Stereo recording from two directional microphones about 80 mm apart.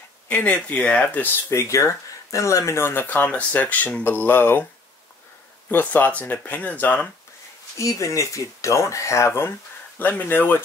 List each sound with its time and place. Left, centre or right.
0.3 s speech: centre
1.5 s speech: left
5.7 s speech: left
7.8 s speech: left
9.9 s speech: left